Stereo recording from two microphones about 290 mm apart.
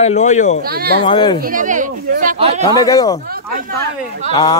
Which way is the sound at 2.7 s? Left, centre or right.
Centre.